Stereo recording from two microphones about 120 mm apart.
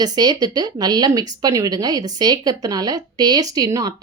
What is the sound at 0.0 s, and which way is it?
Speech, 35° right (ahead or behind).